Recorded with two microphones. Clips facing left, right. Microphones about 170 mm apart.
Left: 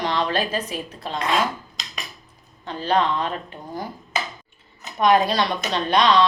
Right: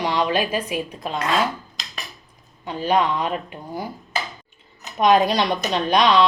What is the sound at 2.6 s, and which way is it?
A woman's voice, 10° right (ahead or behind).